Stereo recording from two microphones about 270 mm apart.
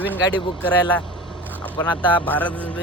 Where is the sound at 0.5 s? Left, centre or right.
Centre.